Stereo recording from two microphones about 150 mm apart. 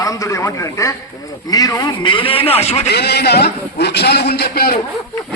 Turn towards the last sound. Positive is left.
turn(degrees=90)